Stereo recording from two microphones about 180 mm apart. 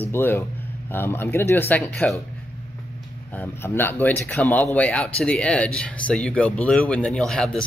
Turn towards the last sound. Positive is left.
turn(degrees=5)  # may be behind; listen again after turning